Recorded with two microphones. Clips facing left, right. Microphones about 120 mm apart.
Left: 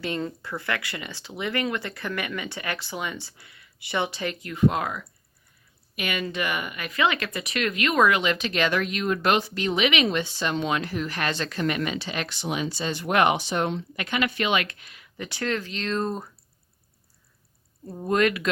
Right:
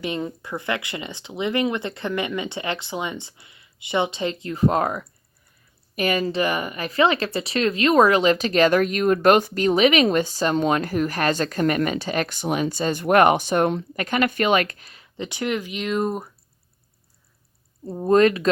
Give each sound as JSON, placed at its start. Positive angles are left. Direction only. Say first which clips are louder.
{"t": 0.0, "sound": "speech", "louder": "right 2 dB", "side_deg": -15}
{"t": 15.2, "sound": "speech", "louder": "right 3 dB", "side_deg": -15}
{"t": 17.8, "sound": "speech", "louder": "right 6 dB", "side_deg": -30}